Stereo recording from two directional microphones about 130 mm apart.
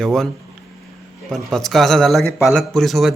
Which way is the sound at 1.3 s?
Centre (ahead or behind).